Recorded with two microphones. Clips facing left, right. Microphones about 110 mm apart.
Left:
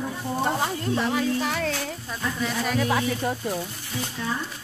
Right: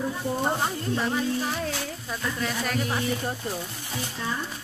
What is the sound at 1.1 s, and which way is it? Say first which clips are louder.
Speech: left 2 dB; 90° left.